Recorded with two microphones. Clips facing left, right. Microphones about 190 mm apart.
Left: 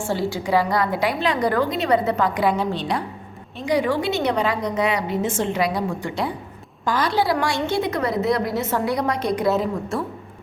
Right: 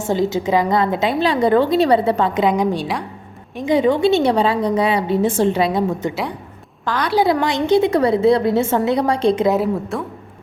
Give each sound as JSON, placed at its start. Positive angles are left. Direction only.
{"t": 0.0, "sound": "a woman's voice", "side_deg": -20}
{"t": 6.8, "sound": "a woman's voice", "side_deg": 5}
{"t": 7.3, "sound": "a woman's voice", "side_deg": -20}
{"t": 9.9, "sound": "a woman's voice", "side_deg": 0}